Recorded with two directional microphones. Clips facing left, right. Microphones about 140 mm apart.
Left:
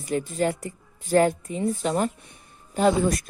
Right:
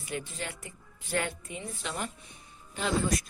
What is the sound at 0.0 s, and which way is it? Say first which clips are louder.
Speech: left 12 dB; 40° left (ahead or behind).